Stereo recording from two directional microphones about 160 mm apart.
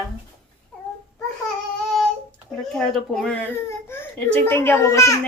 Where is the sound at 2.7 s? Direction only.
Centre (ahead or behind).